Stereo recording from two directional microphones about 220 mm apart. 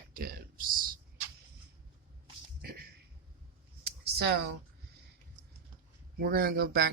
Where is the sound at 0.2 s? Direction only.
40° right (ahead or behind).